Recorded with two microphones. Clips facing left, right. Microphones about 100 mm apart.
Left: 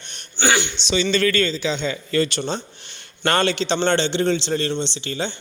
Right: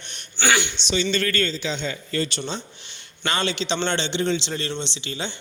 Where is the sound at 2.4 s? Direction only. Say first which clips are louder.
Left 4 dB; 45° left (ahead or behind).